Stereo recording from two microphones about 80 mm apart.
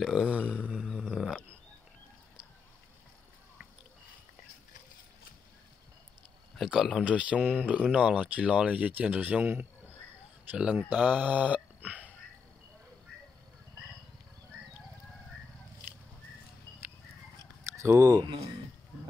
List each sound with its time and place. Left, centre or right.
0.0 s speech: centre
1.0 s a sound: centre
6.5 s speech: centre
7.1 s speech: centre
17.8 s speech: right